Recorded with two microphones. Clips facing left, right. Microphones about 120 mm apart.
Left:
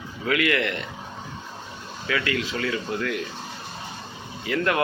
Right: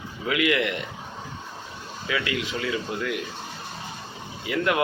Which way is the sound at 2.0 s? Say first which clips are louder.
Left 2 dB; 10° right (ahead or behind).